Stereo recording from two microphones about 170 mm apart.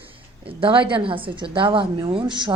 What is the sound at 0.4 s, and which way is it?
A woman's voice, 30° right (ahead or behind).